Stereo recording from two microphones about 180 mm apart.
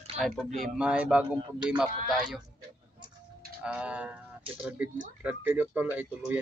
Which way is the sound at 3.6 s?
5° right (ahead or behind).